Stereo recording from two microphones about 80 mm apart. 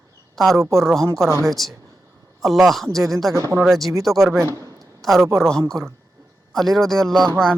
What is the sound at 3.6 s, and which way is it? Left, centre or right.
Speech, centre.